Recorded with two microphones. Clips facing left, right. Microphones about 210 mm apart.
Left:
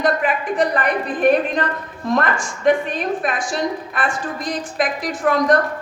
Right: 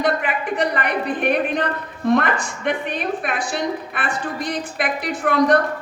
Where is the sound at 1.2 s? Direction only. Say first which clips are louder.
Left 6 dB; 60° right (ahead or behind).